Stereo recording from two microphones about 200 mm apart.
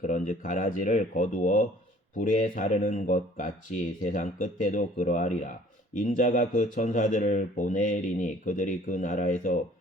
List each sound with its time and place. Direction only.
0.0 s speech: 40° left (ahead or behind)